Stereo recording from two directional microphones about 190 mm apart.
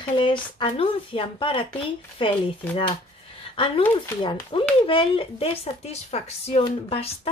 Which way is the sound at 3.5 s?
30° left (ahead or behind).